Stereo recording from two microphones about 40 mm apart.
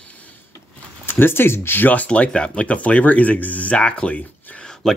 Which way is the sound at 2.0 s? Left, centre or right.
Left.